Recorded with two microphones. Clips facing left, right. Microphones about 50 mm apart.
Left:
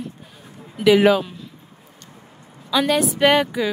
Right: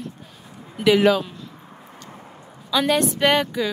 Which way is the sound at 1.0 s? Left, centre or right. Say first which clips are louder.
Left 2 dB; centre.